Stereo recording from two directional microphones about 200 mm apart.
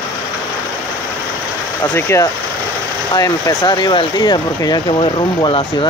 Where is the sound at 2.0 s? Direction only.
10° left (ahead or behind).